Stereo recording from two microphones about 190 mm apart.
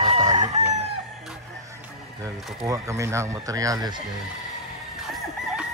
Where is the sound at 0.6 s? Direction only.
40° right (ahead or behind).